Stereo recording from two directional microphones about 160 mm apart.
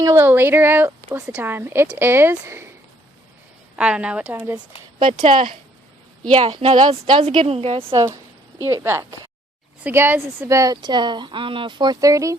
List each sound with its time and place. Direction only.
0.0 s a woman's voice: 15° right (ahead or behind)
3.8 s a woman's voice: 5° right (ahead or behind)
5.2 s speech: 55° right (ahead or behind)
6.3 s speech: 40° right (ahead or behind)
7.9 s a woman's voice: 25° right (ahead or behind)